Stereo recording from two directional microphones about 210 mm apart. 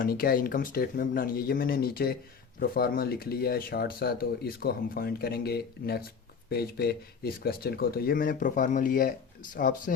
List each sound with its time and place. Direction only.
0.0 s speech: 45° left (ahead or behind)